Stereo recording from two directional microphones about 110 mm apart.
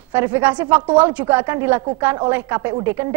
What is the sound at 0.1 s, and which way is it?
A woman's voice, 20° right (ahead or behind).